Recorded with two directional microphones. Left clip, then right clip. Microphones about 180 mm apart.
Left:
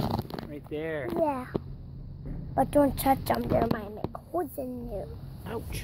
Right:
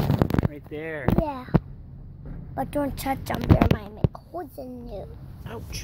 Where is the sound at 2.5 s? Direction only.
30° left (ahead or behind).